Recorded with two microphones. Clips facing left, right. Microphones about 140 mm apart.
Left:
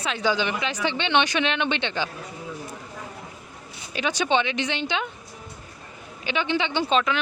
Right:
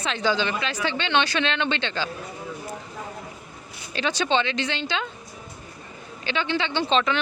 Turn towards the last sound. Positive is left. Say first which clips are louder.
# even
turn(degrees=5)  # may be behind; listen again after turning